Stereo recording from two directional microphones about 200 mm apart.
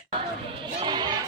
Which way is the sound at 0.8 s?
20° right (ahead or behind).